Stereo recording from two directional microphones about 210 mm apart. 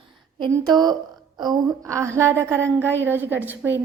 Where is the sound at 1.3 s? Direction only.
20° right (ahead or behind).